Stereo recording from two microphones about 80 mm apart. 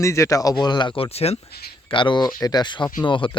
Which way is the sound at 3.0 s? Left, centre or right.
Left.